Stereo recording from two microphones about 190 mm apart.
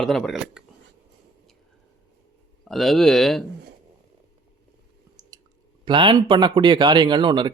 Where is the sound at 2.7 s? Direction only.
Centre (ahead or behind).